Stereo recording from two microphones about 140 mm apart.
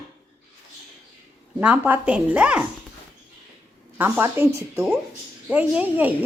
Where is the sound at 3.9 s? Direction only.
15° right (ahead or behind).